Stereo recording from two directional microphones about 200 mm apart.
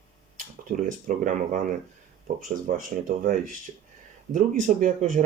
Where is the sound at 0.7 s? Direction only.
40° right (ahead or behind).